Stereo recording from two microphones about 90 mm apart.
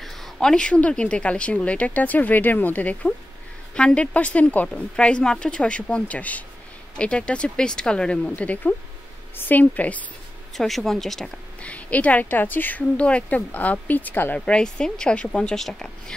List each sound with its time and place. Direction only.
0.0 s speech: 5° left (ahead or behind)
10.5 s speech: centre (ahead or behind)
11.6 s speech: 15° left (ahead or behind)
14.4 s speech: 10° left (ahead or behind)